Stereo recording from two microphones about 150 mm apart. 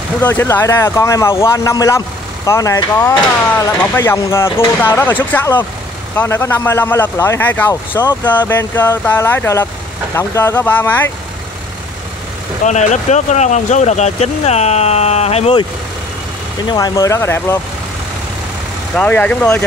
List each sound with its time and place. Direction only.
0.2 s speech: 15° left (ahead or behind)
12.6 s speech: 50° left (ahead or behind)
16.6 s speech: 25° left (ahead or behind)
18.9 s speech: 10° left (ahead or behind)